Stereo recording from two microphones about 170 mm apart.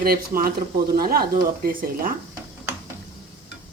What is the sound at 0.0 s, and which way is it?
Speech, 60° right (ahead or behind).